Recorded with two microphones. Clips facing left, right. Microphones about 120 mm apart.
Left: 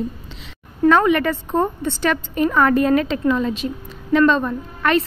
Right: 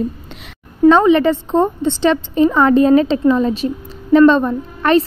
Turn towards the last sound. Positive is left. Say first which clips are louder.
# right 5 dB
turn(degrees=-30)  # may be behind; listen again after turning